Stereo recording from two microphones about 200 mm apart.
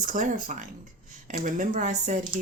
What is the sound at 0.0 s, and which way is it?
Speech, 40° right (ahead or behind).